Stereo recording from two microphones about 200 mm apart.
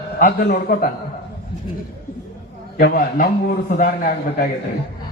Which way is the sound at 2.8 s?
45° left (ahead or behind).